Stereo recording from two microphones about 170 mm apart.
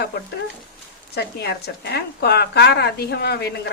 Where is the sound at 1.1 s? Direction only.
75° left (ahead or behind).